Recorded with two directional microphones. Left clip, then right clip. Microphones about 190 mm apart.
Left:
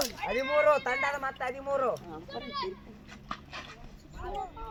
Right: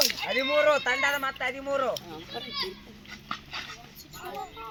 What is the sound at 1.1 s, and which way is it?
Speech, 45° left (ahead or behind).